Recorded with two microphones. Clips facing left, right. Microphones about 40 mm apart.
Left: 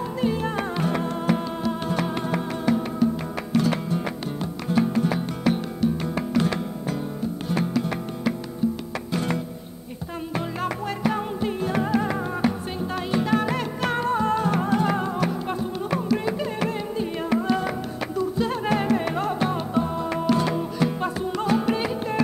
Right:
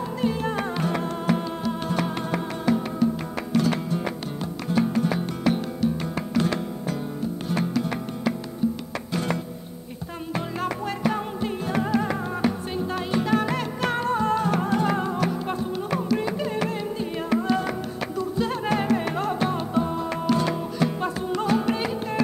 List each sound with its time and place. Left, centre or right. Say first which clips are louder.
0.2 s music: left 1 dB; centre
10.6 s music: even; centre